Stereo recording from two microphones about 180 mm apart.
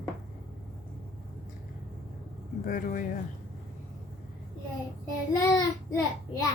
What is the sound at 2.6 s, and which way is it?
Speech, 50° left (ahead or behind).